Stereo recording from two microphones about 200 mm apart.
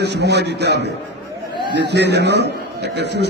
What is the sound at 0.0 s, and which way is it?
A man's voice, 55° right (ahead or behind).